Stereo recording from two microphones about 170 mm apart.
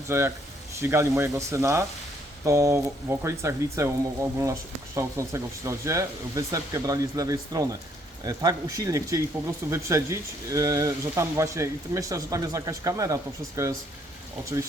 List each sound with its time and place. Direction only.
0.1 s speech: 15° right (ahead or behind)